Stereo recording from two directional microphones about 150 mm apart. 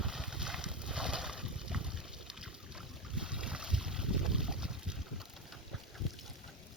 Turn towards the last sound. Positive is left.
turn(degrees=-5)  # may be behind; listen again after turning